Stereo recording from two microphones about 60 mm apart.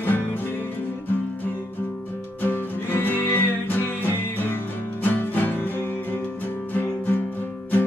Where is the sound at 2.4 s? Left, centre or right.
Left.